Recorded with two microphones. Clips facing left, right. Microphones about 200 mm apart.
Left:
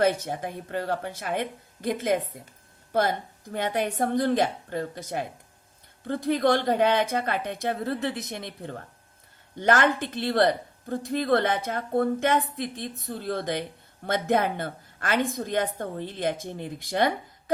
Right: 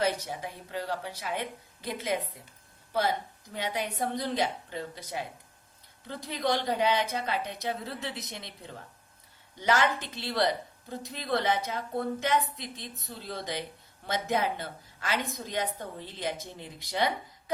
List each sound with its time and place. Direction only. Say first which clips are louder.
0.0 s a woman's voice: left 6 dB; 50° left (ahead or behind)